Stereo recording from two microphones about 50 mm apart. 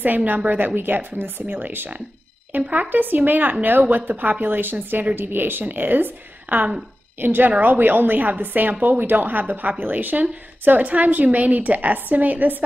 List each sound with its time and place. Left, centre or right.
0.0 s speech: right